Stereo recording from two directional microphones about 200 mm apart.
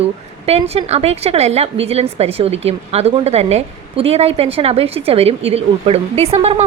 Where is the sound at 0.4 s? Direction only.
30° right (ahead or behind).